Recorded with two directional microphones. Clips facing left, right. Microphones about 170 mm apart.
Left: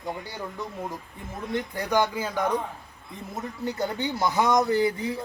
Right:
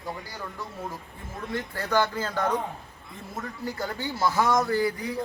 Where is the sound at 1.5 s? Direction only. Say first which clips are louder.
Left 1 dB; 15° left (ahead or behind).